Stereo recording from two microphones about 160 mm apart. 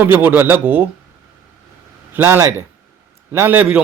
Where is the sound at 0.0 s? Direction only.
10° right (ahead or behind).